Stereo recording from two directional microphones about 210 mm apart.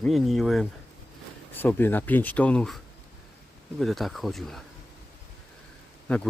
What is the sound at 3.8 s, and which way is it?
Speech, centre (ahead or behind).